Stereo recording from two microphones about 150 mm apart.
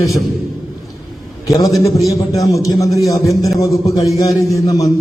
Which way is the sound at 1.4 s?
25° left (ahead or behind).